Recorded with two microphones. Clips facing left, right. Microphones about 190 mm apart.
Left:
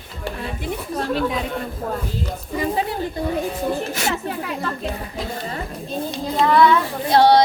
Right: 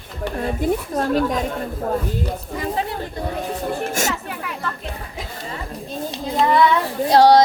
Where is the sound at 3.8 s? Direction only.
45° right (ahead or behind).